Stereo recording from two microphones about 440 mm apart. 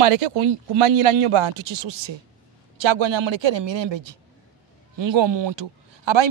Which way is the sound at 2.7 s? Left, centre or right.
Right.